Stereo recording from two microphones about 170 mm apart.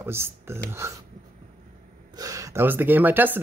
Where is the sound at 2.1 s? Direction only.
20° right (ahead or behind).